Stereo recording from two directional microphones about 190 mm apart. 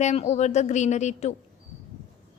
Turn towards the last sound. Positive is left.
turn(degrees=35)  # may be behind; listen again after turning